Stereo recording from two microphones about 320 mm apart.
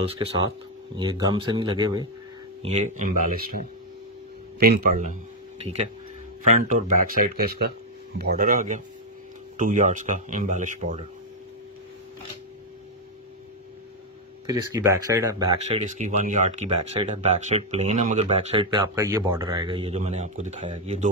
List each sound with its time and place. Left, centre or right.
0.0 s speech: centre
14.4 s speech: centre